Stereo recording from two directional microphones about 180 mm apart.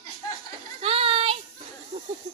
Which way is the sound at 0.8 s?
30° right (ahead or behind).